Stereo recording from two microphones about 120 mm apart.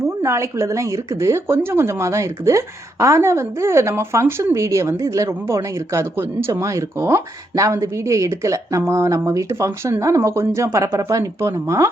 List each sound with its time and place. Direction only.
0.0 s a woman's voice: 25° right (ahead or behind)